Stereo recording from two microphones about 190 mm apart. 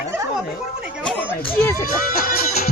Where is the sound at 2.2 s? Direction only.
40° left (ahead or behind).